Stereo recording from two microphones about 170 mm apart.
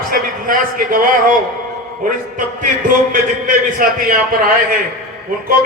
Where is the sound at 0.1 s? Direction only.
55° right (ahead or behind).